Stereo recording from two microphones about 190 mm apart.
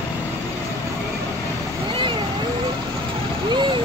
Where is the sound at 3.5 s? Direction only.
25° right (ahead or behind).